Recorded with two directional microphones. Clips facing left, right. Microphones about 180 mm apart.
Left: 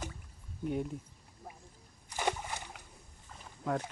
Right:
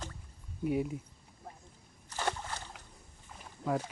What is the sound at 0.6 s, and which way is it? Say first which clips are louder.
Speech: right 3 dB; 5° right (ahead or behind).